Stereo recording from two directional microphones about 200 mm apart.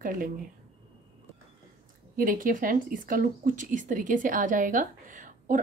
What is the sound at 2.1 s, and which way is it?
Speech, 45° right (ahead or behind).